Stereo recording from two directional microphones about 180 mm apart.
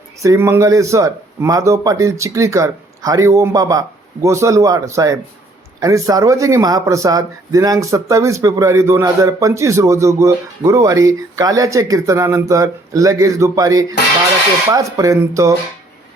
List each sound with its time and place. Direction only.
0.2 s speech: 15° right (ahead or behind)